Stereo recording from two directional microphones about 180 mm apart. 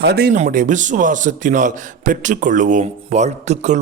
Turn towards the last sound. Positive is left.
turn(degrees=-40)  # may be behind; listen again after turning